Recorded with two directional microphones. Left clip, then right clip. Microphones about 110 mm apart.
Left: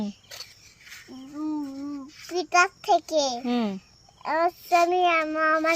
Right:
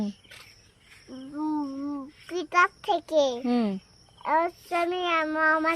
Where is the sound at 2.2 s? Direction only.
30° right (ahead or behind).